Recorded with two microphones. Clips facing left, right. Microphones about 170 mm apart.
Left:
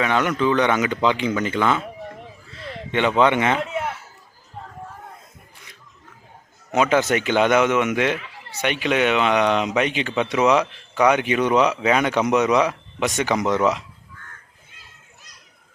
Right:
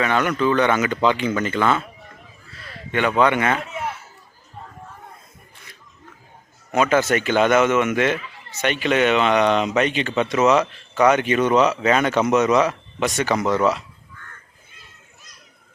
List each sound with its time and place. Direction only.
0.0 s speech: 15° left (ahead or behind)
2.6 s a sound: 25° left (ahead or behind)
3.2 s speech: 20° left (ahead or behind)
6.7 s speech: 15° left (ahead or behind)